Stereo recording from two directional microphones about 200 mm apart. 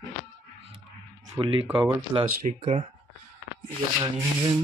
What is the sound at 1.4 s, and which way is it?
Speech, 25° right (ahead or behind).